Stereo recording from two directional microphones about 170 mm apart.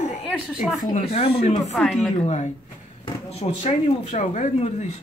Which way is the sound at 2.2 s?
40° left (ahead or behind).